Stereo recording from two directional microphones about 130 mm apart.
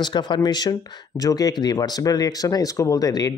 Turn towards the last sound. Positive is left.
turn(degrees=25)  # may be behind; listen again after turning